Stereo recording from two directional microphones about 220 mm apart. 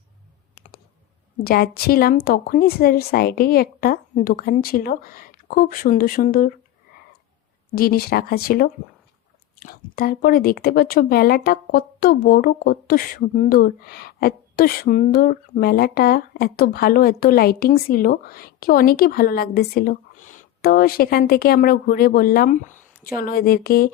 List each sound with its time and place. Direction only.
1.5 s a woman's voice: 45° left (ahead or behind)
7.8 s speech: 45° left (ahead or behind)